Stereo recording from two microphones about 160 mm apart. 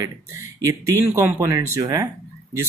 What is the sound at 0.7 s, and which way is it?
Speech, 20° right (ahead or behind).